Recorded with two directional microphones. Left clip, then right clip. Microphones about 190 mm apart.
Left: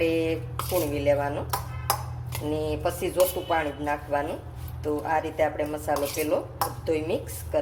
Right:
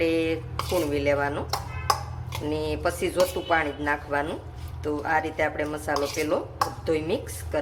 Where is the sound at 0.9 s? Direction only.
15° right (ahead or behind).